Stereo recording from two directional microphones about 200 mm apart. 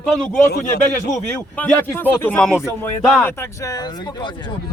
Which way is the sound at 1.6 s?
10° left (ahead or behind).